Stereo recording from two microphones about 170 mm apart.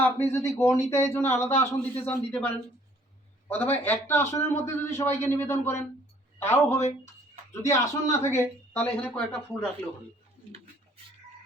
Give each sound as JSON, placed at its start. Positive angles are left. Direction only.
{"t": 0.0, "sound": "speech", "side_deg": 15}
{"t": 6.7, "sound": "speech", "side_deg": 40}
{"t": 7.5, "sound": "speech", "side_deg": 15}